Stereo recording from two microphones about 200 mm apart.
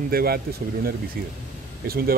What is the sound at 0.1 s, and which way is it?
Speech, 50° right (ahead or behind).